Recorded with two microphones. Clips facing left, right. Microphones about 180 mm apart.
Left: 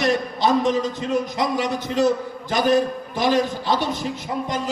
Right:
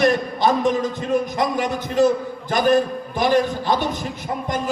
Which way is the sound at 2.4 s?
50° right (ahead or behind).